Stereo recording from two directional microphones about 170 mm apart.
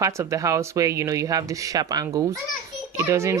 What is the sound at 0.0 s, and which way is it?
A child's voice, 20° right (ahead or behind).